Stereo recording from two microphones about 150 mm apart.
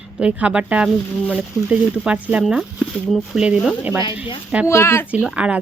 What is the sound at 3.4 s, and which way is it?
Speech, 5° right (ahead or behind).